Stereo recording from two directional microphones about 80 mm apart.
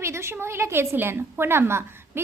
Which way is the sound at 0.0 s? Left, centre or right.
Right.